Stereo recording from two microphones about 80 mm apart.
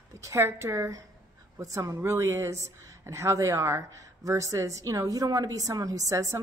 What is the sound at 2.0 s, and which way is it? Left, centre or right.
A woman's voice, right.